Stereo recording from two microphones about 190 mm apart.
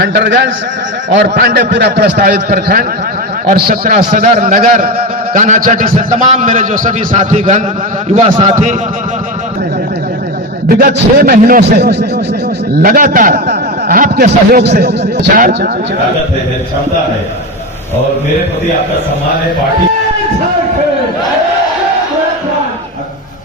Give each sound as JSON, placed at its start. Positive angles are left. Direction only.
{"t": 0.0, "sound": "a man's voice", "side_deg": -70}
{"t": 1.1, "sound": "a man's voice", "side_deg": -60}
{"t": 10.7, "sound": "a man's voice", "side_deg": -50}
{"t": 12.8, "sound": "a man's voice", "side_deg": -45}
{"t": 15.4, "sound": "a man's voice", "side_deg": -45}